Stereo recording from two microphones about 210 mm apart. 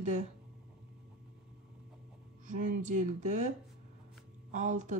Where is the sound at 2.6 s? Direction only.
40° right (ahead or behind).